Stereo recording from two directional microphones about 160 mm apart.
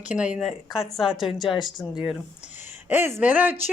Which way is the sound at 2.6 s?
15° right (ahead or behind).